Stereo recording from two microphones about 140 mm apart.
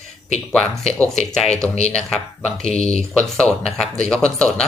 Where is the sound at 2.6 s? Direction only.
50° left (ahead or behind).